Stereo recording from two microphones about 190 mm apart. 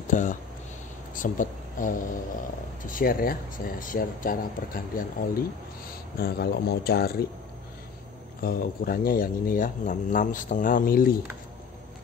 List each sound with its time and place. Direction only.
0.1 s speech: 40° left (ahead or behind)
8.4 s speech: 50° left (ahead or behind)